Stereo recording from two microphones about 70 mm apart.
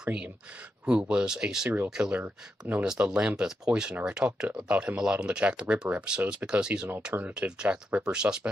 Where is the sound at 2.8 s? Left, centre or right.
Centre.